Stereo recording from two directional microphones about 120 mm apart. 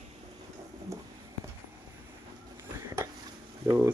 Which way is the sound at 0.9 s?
25° right (ahead or behind).